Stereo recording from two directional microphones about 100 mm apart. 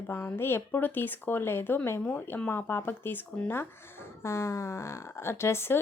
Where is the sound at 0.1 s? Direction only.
25° left (ahead or behind).